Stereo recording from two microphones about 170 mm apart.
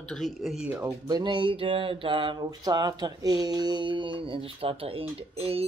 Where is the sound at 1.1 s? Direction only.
25° right (ahead or behind).